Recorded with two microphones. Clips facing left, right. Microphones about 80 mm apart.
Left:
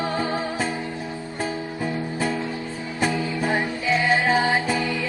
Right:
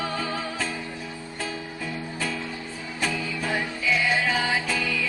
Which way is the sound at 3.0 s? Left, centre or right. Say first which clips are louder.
Left 5 dB; left.